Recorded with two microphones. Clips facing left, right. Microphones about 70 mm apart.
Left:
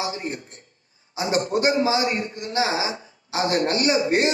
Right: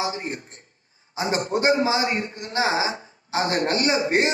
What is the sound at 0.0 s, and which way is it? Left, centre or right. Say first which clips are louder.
A man's voice: right 1 dB; right.